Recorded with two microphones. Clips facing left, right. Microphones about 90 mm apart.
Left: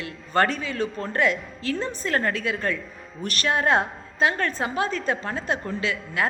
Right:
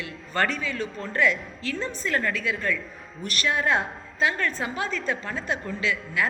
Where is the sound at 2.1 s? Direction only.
35° left (ahead or behind).